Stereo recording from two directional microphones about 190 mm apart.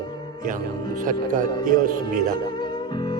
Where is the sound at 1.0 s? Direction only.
45° right (ahead or behind).